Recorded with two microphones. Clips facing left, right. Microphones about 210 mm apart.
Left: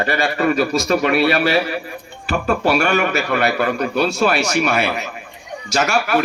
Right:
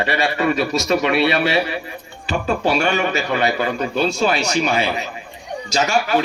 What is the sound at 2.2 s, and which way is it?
A man's voice, 55° left (ahead or behind).